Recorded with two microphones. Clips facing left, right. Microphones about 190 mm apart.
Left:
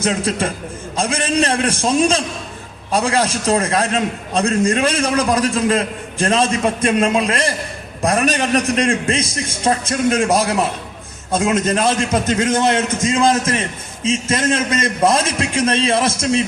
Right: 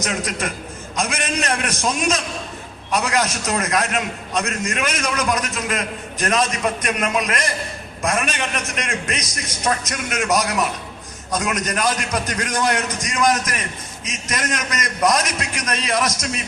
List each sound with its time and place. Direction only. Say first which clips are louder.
0.0 s a man's voice: left 6 dB; 30° left (ahead or behind)